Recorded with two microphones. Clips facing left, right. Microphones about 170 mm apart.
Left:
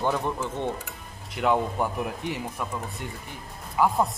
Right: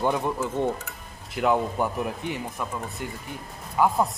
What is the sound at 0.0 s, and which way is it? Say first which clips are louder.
Speech: right 2 dB; 10° right (ahead or behind).